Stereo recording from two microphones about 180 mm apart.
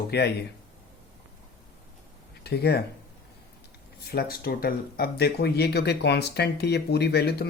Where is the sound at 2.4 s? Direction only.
65° left (ahead or behind).